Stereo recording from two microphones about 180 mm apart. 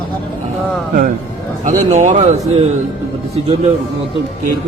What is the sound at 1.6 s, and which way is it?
Speech, 45° right (ahead or behind).